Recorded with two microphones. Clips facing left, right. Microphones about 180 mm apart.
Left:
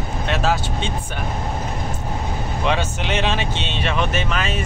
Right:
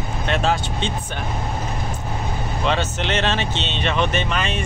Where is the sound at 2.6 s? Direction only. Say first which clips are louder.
Even; 10° left (ahead or behind).